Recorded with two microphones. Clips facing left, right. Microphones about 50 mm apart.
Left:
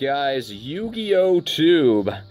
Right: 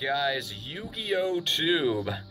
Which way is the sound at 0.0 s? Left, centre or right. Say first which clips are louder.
Left 6 dB; centre.